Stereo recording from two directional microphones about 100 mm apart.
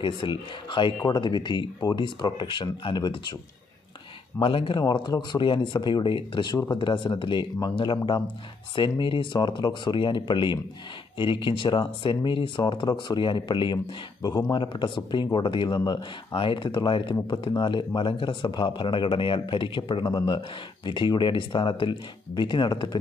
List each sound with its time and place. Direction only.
0.0 s speech: 55° left (ahead or behind)
4.4 s speech: 60° left (ahead or behind)